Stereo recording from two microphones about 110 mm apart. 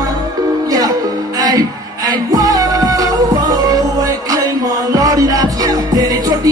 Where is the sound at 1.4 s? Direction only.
35° right (ahead or behind).